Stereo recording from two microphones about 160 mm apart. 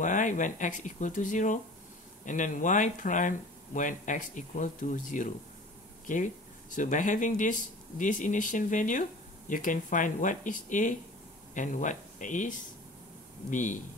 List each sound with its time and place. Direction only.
0.0 s speech: 55° left (ahead or behind)